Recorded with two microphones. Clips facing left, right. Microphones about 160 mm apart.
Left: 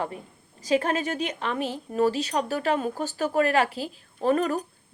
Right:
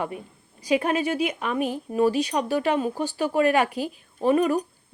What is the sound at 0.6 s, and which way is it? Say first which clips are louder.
Speech: right 2 dB; 10° right (ahead or behind).